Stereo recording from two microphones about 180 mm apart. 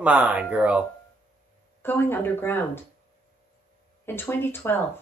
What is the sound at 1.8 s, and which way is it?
Speech, 10° left (ahead or behind).